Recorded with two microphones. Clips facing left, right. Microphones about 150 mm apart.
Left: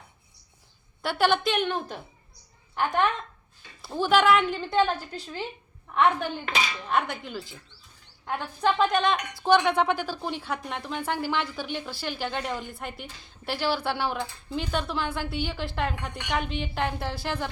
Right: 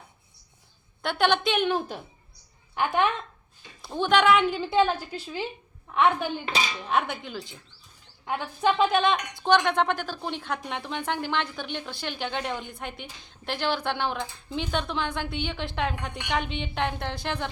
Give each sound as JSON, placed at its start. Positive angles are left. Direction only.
{"t": 1.0, "sound": "a woman's voice", "side_deg": 5}
{"t": 6.5, "sound": "speech", "side_deg": -30}
{"t": 6.7, "sound": "a woman's voice", "side_deg": -5}